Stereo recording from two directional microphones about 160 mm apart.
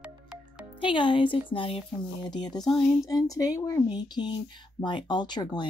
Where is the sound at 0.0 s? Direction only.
5° right (ahead or behind).